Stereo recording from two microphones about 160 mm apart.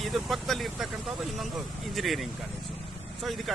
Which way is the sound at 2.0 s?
Centre (ahead or behind).